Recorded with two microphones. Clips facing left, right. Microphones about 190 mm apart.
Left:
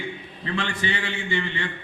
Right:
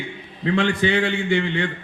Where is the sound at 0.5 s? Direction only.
60° right (ahead or behind).